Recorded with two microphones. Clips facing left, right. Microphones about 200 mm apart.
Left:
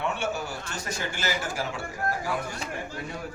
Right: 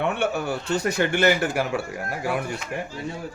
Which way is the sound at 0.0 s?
60° right (ahead or behind).